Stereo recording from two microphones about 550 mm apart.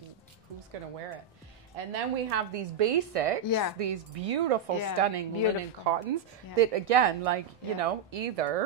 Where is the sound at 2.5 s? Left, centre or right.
Right.